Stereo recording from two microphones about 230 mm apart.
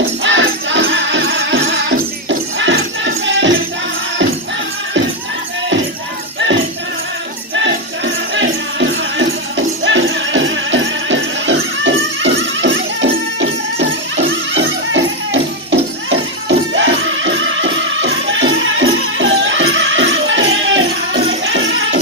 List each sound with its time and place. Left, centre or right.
0.2 s music: right
7.5 s music: right